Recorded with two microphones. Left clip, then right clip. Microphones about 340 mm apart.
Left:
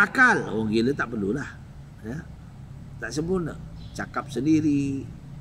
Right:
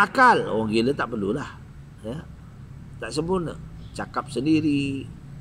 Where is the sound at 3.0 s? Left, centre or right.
Right.